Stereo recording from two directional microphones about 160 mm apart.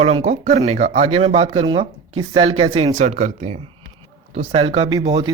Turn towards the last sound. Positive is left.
turn(degrees=-25)  # may be behind; listen again after turning